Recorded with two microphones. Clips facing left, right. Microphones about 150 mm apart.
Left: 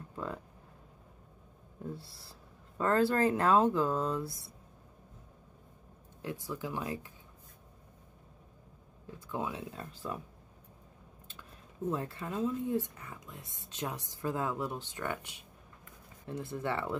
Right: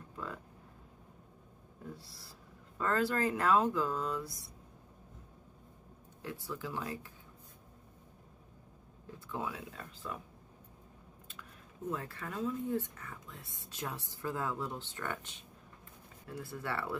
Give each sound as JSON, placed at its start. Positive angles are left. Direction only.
{"t": 0.1, "sound": "a sound", "side_deg": 25}
{"t": 2.8, "sound": "speech", "side_deg": 30}
{"t": 6.2, "sound": "speech", "side_deg": 15}
{"t": 9.3, "sound": "speech", "side_deg": 20}
{"t": 11.9, "sound": "speech", "side_deg": 25}